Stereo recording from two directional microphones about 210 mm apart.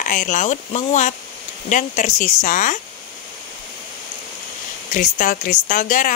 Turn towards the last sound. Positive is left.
turn(degrees=40)  # may be behind; listen again after turning